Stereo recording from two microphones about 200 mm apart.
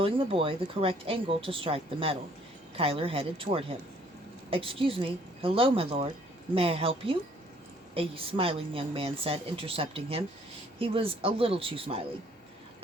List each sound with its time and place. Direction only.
0.0 s a woman's voice: 25° right (ahead or behind)